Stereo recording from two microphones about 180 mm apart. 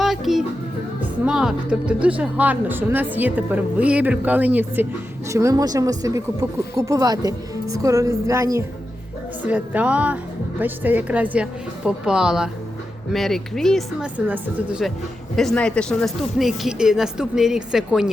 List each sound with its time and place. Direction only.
0.0 s music: centre (ahead or behind)
1.2 s a woman's voice: 5° right (ahead or behind)